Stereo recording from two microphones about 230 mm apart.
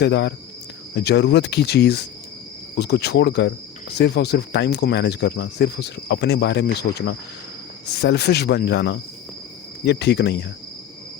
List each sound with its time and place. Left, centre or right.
0.0 s speech: left